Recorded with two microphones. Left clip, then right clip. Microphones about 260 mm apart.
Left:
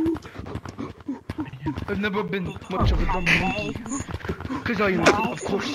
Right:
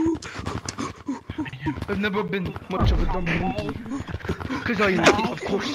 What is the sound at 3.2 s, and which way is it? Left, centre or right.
Speech, left.